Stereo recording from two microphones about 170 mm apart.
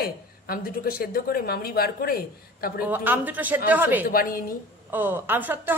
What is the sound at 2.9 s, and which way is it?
A woman's voice, 10° right (ahead or behind).